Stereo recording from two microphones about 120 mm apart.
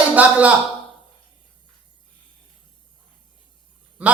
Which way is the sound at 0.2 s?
10° right (ahead or behind).